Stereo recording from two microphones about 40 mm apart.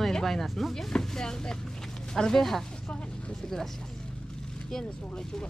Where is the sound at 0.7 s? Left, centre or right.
Centre.